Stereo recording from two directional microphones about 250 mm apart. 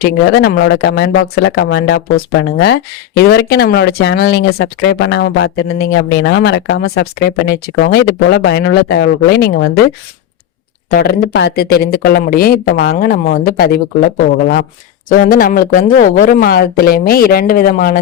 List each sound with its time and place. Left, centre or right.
0.0 s speech: left
10.8 s speech: left